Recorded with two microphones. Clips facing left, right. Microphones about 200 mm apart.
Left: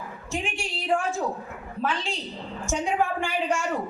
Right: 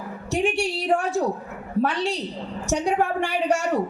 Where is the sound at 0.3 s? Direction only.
70° right (ahead or behind).